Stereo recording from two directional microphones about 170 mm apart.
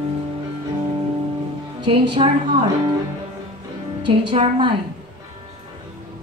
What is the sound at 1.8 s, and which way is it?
Speech, 30° right (ahead or behind).